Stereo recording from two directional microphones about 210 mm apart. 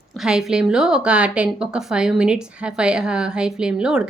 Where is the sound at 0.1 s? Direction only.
Centre (ahead or behind).